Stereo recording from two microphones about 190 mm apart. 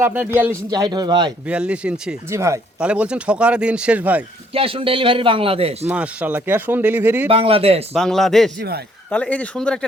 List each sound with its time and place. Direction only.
0.0 s a man's voice: 10° right (ahead or behind)
1.5 s a man's voice: 5° right (ahead or behind)
4.5 s a man's voice: 30° right (ahead or behind)
5.9 s speech: 5° right (ahead or behind)
7.3 s a man's voice: 30° right (ahead or behind)
7.9 s a man's voice: centre (ahead or behind)